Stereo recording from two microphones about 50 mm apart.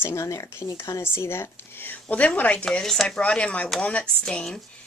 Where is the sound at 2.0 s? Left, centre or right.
Left.